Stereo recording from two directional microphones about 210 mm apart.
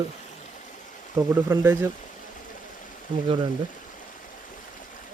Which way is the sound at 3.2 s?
25° right (ahead or behind).